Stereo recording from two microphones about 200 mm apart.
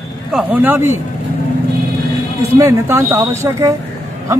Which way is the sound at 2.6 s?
15° right (ahead or behind).